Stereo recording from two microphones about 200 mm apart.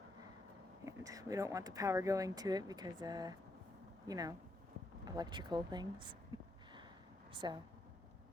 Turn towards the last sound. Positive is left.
turn(degrees=-25)  # may be behind; listen again after turning